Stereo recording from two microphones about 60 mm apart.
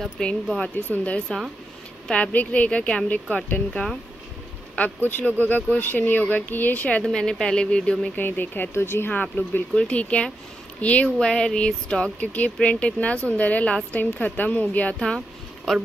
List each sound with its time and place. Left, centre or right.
0.2 s speech: centre
0.6 s speech: left
4.7 s speech: left
7.1 s speech: centre
8.2 s speech: left
9.1 s speech: left
11.2 s speech: centre
15.7 s speech: centre